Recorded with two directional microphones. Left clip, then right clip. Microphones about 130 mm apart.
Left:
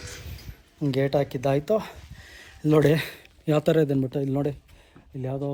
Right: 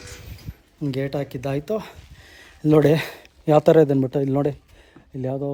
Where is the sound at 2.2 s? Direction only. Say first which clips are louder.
Right 4 dB; 50° right (ahead or behind).